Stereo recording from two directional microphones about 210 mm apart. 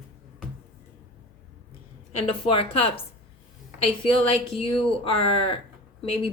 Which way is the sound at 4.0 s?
25° left (ahead or behind).